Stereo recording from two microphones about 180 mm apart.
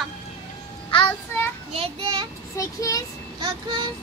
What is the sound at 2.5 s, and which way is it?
Vehicle, 20° left (ahead or behind).